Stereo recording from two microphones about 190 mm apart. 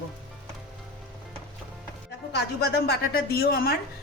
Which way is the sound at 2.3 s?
60° left (ahead or behind).